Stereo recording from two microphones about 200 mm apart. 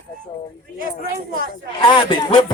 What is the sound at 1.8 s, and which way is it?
Music, 25° left (ahead or behind).